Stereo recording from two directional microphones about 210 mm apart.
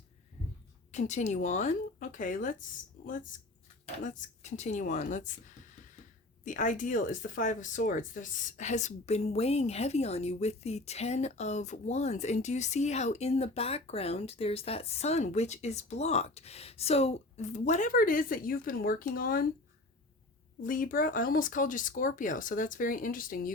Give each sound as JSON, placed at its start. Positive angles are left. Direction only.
{"t": 0.9, "sound": "speech", "side_deg": 35}
{"t": 4.0, "sound": "speech", "side_deg": 35}
{"t": 20.6, "sound": "speech", "side_deg": 40}